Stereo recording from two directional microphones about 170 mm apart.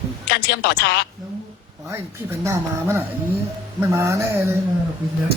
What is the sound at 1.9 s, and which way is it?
Speech, 15° right (ahead or behind).